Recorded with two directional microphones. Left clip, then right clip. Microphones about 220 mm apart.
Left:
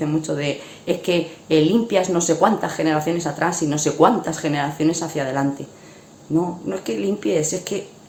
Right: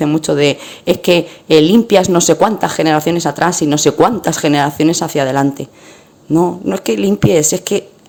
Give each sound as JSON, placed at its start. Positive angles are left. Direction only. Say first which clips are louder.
{"t": 0.0, "sound": "speech", "louder": "right 10 dB", "side_deg": -45}